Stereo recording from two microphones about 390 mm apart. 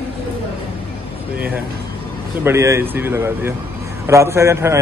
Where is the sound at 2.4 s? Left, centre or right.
Centre.